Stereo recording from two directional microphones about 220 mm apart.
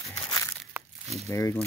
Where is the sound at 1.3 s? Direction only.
15° left (ahead or behind).